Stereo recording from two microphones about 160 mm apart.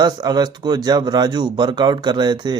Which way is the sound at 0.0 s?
25° right (ahead or behind).